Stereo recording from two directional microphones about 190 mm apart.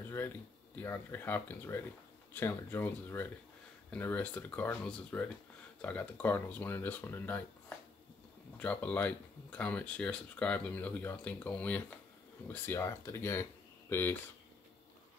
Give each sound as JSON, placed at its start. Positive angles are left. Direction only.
{"t": 0.7, "sound": "speech", "side_deg": 10}
{"t": 8.5, "sound": "speech", "side_deg": 5}